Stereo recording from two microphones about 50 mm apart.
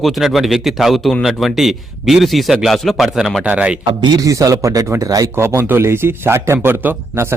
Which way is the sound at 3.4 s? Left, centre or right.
Right.